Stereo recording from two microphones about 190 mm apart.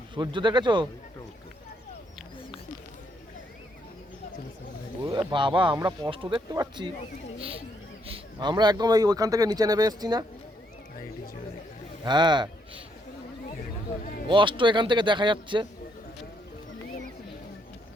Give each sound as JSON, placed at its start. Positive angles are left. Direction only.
{"t": 0.1, "sound": "speech", "side_deg": -25}
{"t": 5.3, "sound": "speech", "side_deg": -25}
{"t": 8.0, "sound": "speech", "side_deg": -25}
{"t": 12.0, "sound": "speech", "side_deg": -25}
{"t": 13.6, "sound": "a sound", "side_deg": 45}
{"t": 14.3, "sound": "speech", "side_deg": -25}